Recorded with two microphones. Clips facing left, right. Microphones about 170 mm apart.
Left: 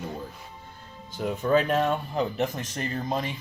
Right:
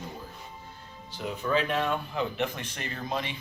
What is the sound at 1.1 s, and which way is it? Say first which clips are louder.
Speech: left 5 dB; 45° left (ahead or behind).